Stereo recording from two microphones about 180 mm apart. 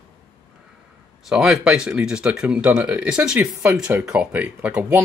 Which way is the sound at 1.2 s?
Centre (ahead or behind).